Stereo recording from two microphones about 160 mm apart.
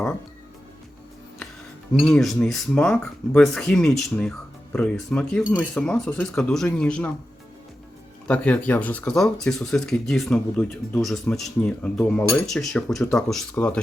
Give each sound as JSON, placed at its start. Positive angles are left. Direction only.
{"t": 2.0, "sound": "speech", "side_deg": 5}
{"t": 8.3, "sound": "speech", "side_deg": 5}